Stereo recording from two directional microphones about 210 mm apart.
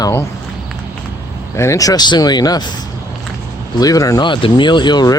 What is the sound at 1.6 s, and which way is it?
Speech, 15° left (ahead or behind).